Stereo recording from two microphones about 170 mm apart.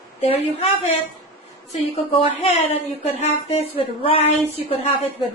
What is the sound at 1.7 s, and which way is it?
Speech, 35° left (ahead or behind).